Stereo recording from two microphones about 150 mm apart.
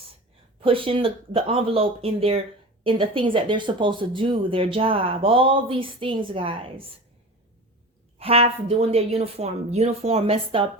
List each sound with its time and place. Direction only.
0.6 s speech: 35° right (ahead or behind)
8.2 s a woman's voice: 40° right (ahead or behind)